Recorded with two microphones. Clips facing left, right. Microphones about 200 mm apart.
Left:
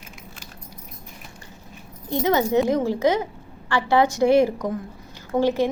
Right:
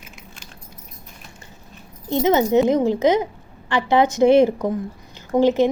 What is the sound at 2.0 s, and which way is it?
A woman's voice, 20° right (ahead or behind).